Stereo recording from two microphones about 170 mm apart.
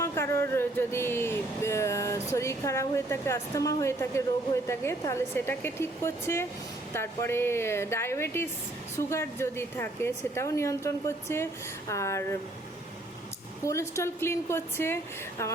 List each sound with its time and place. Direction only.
0.0 s a sound: 15° left (ahead or behind)
2.3 s a woman's voice: 15° left (ahead or behind)
13.7 s a woman's voice: 15° left (ahead or behind)